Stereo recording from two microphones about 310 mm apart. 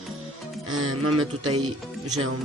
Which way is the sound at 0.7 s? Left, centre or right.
Right.